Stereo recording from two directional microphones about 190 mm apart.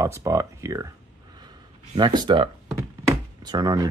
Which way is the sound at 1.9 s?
25° right (ahead or behind).